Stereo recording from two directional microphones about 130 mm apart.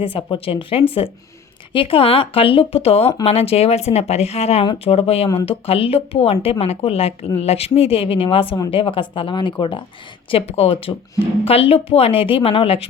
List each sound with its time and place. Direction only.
0.0 s speech: 40° left (ahead or behind)